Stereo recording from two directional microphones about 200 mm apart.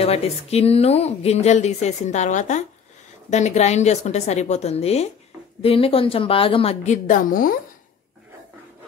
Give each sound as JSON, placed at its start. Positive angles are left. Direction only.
{"t": 0.0, "sound": "a woman's voice", "side_deg": 30}